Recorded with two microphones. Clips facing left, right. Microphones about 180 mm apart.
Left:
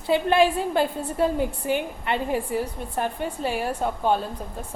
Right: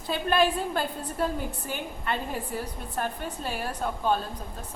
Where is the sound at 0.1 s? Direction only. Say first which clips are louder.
Left 5 dB; 20° left (ahead or behind).